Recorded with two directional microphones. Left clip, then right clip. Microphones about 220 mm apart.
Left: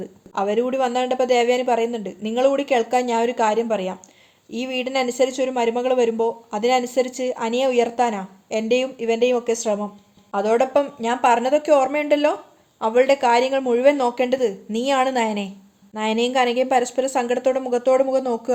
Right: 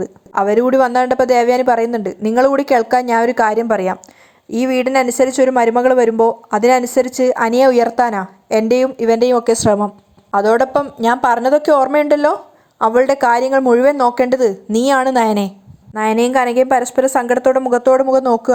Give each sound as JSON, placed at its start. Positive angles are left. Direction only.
{"t": 0.5, "sound": "a woman's voice", "side_deg": -35}